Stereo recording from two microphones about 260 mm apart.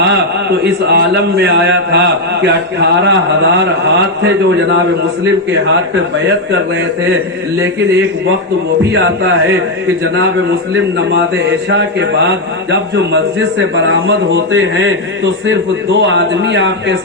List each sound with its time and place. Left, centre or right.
0.6 s a man's voice: right
10.9 s a man's voice: right